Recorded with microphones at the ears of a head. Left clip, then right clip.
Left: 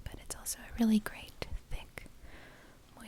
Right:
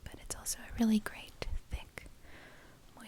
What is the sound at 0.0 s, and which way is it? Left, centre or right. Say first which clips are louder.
Whispering: right 1 dB; centre.